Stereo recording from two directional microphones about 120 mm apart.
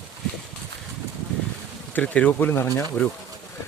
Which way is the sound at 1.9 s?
10° left (ahead or behind).